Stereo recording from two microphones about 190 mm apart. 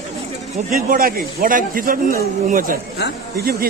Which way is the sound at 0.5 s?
45° right (ahead or behind).